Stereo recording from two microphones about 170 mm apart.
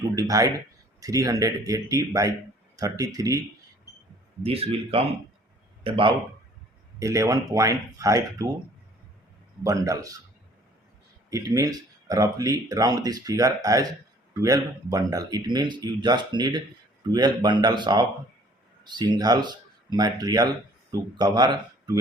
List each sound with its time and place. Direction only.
0.2 s speech: 20° right (ahead or behind)
4.4 s speech: 35° right (ahead or behind)
7.0 s speech: 20° right (ahead or behind)
9.6 s speech: 20° right (ahead or behind)
11.3 s speech: 20° right (ahead or behind)